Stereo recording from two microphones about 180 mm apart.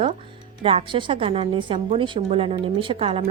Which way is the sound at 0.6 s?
30° right (ahead or behind).